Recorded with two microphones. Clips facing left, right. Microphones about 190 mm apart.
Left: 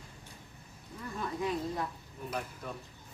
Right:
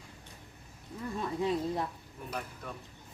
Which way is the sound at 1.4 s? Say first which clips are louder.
Right 3 dB; 25° right (ahead or behind).